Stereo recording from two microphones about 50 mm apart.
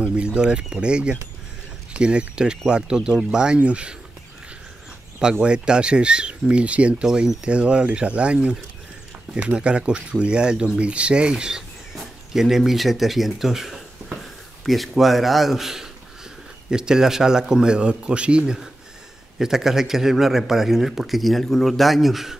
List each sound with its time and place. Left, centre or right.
0.0 s a man's voice: right
5.4 s speech: centre
7.1 s a man's voice: centre
7.4 s a man's voice: right
19.3 s a man's voice: centre